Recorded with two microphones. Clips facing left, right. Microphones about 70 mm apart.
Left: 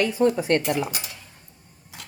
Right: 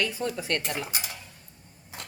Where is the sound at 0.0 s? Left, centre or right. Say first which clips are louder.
Left 9 dB; left.